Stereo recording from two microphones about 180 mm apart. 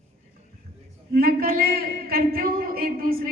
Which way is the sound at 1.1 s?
55° right (ahead or behind).